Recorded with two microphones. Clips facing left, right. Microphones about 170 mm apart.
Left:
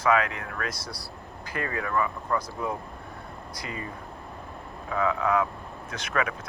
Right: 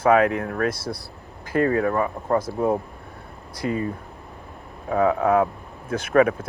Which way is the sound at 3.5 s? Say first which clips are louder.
Right 12 dB; 50° right (ahead or behind).